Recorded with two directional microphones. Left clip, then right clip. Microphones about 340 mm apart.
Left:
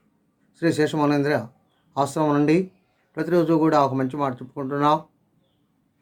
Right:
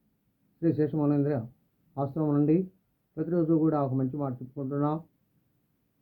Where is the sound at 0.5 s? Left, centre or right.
Centre.